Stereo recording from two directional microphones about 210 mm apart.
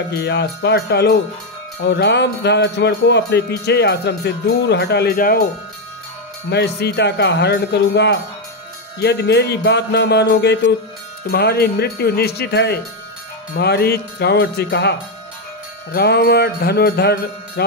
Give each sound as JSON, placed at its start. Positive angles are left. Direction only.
{"t": 0.1, "sound": "music", "side_deg": 50}
{"t": 6.5, "sound": "music", "side_deg": 50}